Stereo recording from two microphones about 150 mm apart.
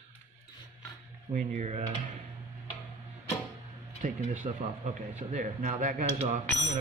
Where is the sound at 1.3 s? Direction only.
65° right (ahead or behind); by 1.8 s 50° right (ahead or behind).